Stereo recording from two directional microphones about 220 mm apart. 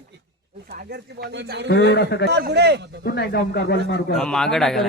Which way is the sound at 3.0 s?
50° left (ahead or behind).